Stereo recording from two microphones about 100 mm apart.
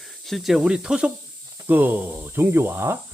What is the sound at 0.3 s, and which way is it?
Speech, centre (ahead or behind).